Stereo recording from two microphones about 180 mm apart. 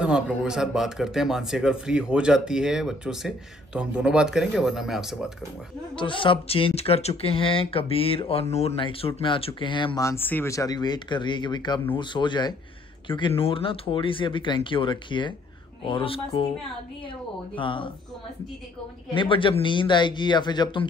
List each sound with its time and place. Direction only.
0.0 s speech: 5° right (ahead or behind)
5.9 s speech: 30° left (ahead or behind)
17.6 s speech: 30° left (ahead or behind)
19.1 s speech: 30° left (ahead or behind)